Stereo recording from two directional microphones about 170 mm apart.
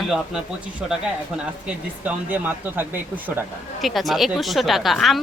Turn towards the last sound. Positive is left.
turn(degrees=0)  # may be behind; listen again after turning